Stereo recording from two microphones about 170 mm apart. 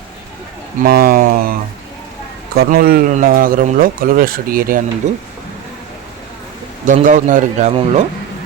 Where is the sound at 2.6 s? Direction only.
55° right (ahead or behind).